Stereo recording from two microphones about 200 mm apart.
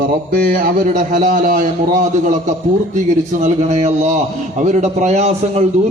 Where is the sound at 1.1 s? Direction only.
40° right (ahead or behind).